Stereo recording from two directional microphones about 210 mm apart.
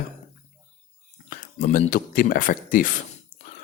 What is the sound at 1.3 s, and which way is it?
Speech, 40° left (ahead or behind).